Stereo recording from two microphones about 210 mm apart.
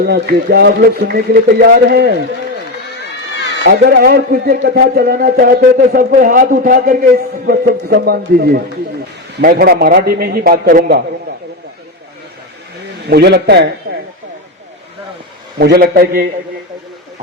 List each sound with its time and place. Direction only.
0.0 s a man's voice: 50° right (ahead or behind)
3.6 s a man's voice: 45° right (ahead or behind)
13.1 s a man's voice: 50° right (ahead or behind)
13.9 s speech: 40° right (ahead or behind)
15.5 s a man's voice: 45° right (ahead or behind)